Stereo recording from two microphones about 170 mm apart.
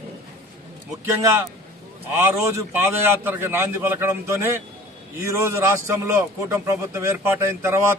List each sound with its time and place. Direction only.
1.0 s a man's voice: 15° right (ahead or behind)